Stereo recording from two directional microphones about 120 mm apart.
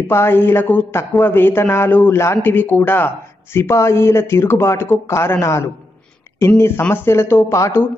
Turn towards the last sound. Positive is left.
turn(degrees=20)  # may be behind; listen again after turning